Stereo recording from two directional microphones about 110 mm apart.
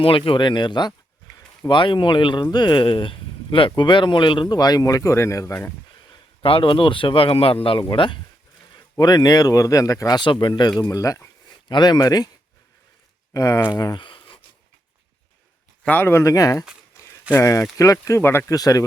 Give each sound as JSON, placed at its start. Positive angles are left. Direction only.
{"t": 0.0, "sound": "speech", "side_deg": 55}
{"t": 6.1, "sound": "a man's voice", "side_deg": 55}
{"t": 10.2, "sound": "speech", "side_deg": 45}
{"t": 10.8, "sound": "speech", "side_deg": 30}
{"t": 13.3, "sound": "speech", "side_deg": 30}
{"t": 13.7, "sound": "a sound", "side_deg": 40}
{"t": 15.8, "sound": "speech", "side_deg": 15}
{"t": 18.5, "sound": "speech", "side_deg": 35}